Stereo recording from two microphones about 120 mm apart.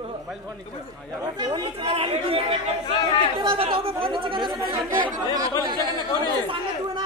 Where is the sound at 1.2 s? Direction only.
35° right (ahead or behind).